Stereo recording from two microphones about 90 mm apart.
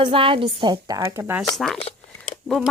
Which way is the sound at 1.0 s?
30° right (ahead or behind).